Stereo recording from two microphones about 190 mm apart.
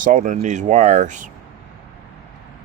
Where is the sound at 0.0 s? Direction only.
45° right (ahead or behind).